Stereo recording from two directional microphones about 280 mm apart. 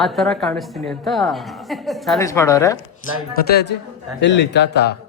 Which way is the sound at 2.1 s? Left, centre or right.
Centre.